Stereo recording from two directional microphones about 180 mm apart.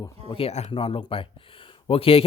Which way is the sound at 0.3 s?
30° left (ahead or behind).